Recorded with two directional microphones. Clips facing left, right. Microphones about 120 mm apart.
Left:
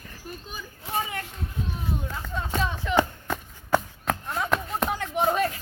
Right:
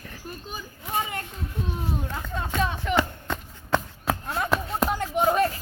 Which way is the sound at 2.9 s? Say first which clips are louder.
Left 1 dB; 10° left (ahead or behind).